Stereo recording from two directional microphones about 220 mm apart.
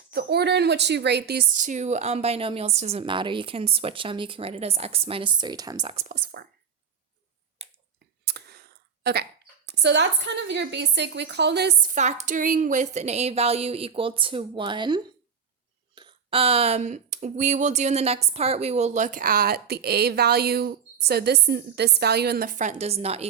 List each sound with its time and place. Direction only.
0.1 s a woman's voice: 45° right (ahead or behind); by 6.1 s 25° right (ahead or behind)
6.2 s a woman's voice: 45° right (ahead or behind)
8.2 s clicking: 50° right (ahead or behind)
9.0 s a woman's voice: 50° right (ahead or behind)
11.9 s a woman's voice: 30° right (ahead or behind)